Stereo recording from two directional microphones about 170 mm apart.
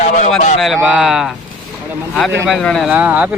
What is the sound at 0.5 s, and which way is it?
Speech, centre (ahead or behind).